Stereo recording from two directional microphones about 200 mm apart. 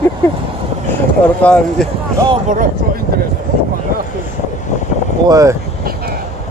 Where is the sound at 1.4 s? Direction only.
5° left (ahead or behind).